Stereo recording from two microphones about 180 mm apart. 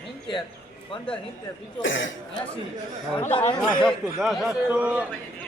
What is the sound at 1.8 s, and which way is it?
Speech, 90° left.